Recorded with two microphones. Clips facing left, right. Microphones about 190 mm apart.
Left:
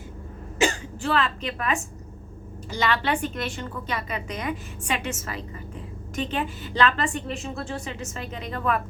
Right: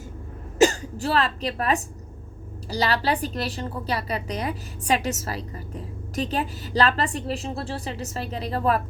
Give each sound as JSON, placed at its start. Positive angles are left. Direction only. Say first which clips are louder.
{"t": 0.6, "sound": "a woman's voice", "louder": "right 5 dB", "side_deg": -40}